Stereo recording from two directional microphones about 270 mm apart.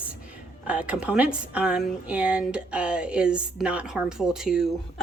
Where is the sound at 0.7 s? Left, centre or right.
Centre.